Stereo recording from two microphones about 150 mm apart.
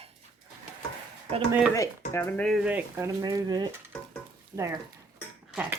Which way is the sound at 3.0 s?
25° right (ahead or behind).